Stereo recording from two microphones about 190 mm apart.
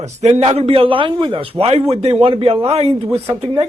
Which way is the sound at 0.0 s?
35° right (ahead or behind).